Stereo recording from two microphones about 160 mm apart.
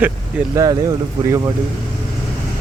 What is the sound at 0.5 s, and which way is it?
Speech, 20° right (ahead or behind).